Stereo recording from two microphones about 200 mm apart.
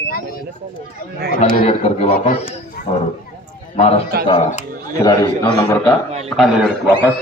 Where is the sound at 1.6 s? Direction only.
30° left (ahead or behind).